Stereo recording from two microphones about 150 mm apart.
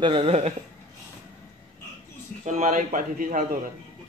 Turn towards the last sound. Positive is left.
turn(degrees=-65)  # may be behind; listen again after turning